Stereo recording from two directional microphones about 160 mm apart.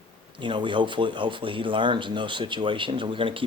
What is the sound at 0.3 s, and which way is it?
Speech, 30° right (ahead or behind).